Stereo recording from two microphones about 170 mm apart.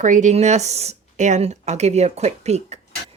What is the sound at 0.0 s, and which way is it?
Speech, 45° right (ahead or behind).